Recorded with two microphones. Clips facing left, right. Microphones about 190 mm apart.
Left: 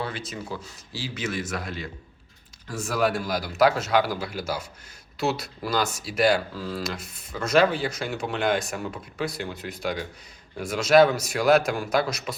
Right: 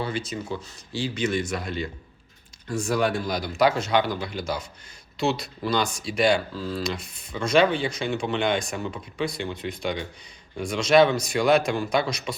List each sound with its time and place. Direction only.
0.0 s speech: centre (ahead or behind)